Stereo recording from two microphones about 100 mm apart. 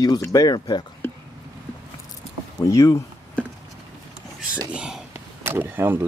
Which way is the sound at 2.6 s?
30° left (ahead or behind).